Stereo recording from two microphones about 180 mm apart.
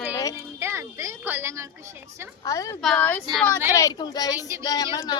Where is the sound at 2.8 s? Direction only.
5° left (ahead or behind).